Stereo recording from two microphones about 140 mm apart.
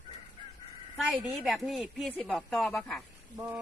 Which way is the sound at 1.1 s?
Centre (ahead or behind).